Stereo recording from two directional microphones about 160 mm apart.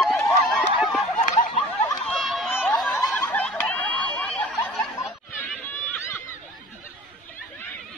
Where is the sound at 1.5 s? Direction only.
30° left (ahead or behind).